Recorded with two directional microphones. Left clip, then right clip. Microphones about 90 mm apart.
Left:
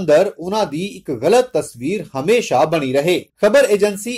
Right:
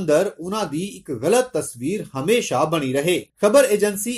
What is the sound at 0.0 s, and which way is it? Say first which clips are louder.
Speech: left 5 dB; 20° left (ahead or behind).